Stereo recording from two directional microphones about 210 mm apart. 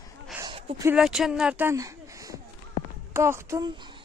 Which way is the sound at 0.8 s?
Centre (ahead or behind).